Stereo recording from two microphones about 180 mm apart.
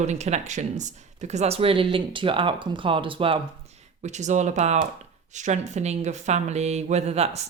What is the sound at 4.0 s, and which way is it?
Speech, 40° right (ahead or behind).